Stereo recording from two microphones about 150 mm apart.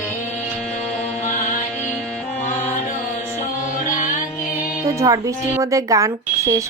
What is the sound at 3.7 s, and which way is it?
Music, 65° left (ahead or behind).